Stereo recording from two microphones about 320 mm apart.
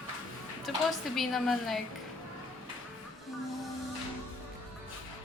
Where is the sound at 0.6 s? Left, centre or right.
Centre.